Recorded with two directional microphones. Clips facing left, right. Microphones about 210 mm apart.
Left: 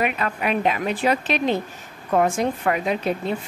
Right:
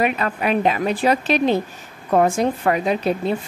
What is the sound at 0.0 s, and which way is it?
A woman's voice, 35° right (ahead or behind).